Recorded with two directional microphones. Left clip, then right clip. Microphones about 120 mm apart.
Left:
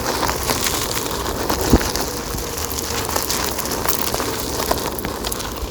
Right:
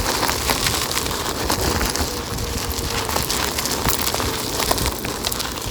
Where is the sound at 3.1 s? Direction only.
60° left (ahead or behind).